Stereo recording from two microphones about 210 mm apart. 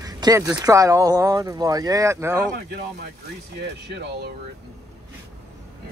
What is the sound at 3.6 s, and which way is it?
Speech, 50° right (ahead or behind).